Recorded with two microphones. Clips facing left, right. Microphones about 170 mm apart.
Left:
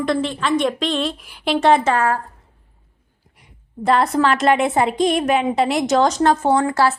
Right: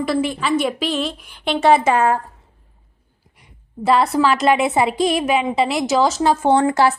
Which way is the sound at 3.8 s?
5° right (ahead or behind).